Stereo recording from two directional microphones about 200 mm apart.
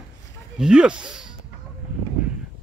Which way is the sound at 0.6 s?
5° right (ahead or behind).